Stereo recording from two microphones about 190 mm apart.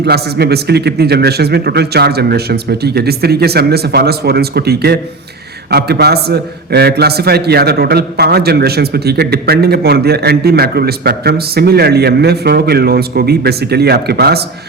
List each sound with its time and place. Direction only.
0.0 s a man's voice: 55° right (ahead or behind)